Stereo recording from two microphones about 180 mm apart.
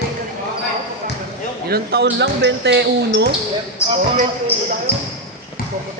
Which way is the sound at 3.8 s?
15° left (ahead or behind).